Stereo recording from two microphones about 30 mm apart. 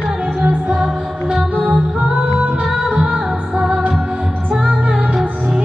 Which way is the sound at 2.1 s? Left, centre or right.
Right.